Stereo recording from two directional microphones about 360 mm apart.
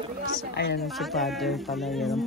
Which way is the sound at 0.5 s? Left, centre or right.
Left.